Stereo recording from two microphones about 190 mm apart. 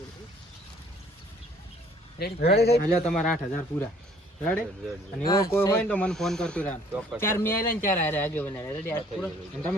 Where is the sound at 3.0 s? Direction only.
5° left (ahead or behind).